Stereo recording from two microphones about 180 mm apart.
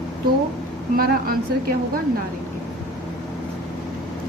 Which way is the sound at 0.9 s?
55° right (ahead or behind).